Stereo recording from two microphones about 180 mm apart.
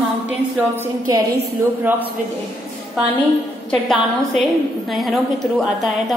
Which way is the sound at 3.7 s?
Centre (ahead or behind).